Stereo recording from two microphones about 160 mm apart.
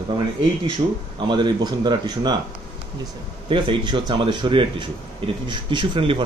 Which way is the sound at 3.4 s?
30° right (ahead or behind).